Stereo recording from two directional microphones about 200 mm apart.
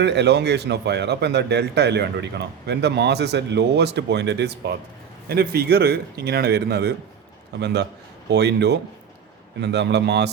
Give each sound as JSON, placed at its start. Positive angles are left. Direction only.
{"t": 0.0, "sound": "speech", "side_deg": -60}